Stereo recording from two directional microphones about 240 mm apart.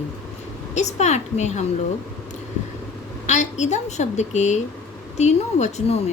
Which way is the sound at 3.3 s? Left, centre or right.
Left.